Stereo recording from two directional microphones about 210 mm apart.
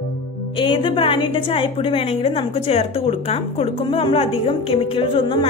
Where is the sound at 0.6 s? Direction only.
25° left (ahead or behind).